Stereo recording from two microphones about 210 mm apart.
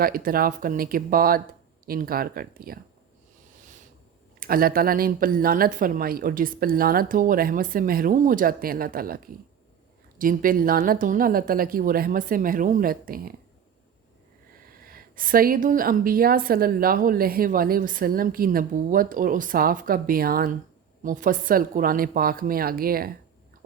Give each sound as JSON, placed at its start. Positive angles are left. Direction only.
{"t": 0.0, "sound": "a woman's voice", "side_deg": -45}
{"t": 4.4, "sound": "a woman's voice", "side_deg": -45}
{"t": 14.8, "sound": "a woman's voice", "side_deg": -40}